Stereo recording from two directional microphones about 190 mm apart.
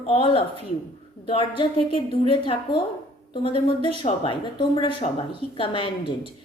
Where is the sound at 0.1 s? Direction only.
30° left (ahead or behind).